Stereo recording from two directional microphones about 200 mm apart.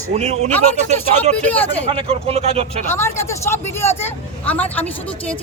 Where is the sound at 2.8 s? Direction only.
10° left (ahead or behind).